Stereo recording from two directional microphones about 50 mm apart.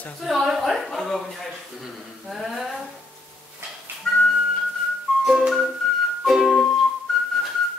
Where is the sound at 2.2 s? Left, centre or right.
Centre.